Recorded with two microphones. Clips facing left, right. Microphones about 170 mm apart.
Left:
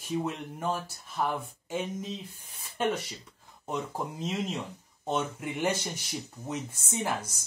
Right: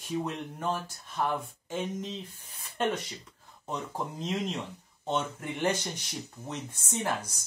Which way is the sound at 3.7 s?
5° left (ahead or behind).